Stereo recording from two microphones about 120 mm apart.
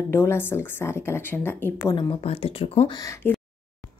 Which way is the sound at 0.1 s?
20° left (ahead or behind).